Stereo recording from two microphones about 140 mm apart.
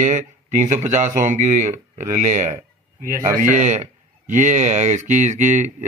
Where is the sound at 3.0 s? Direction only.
90° right.